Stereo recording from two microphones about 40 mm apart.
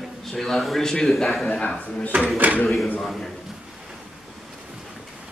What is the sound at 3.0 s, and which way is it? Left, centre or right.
Speech, centre.